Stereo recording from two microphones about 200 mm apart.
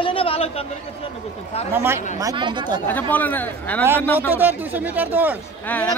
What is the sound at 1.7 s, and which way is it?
A woman's voice, 10° right (ahead or behind).